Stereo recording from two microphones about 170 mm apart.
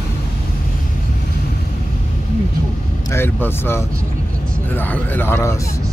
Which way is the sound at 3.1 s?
15° left (ahead or behind).